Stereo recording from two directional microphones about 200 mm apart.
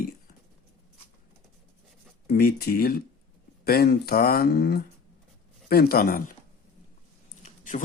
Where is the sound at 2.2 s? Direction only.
50° left (ahead or behind).